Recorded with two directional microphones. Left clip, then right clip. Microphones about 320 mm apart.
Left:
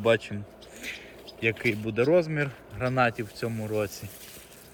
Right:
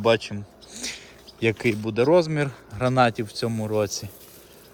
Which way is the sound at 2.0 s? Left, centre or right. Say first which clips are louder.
Right 4 dB; centre.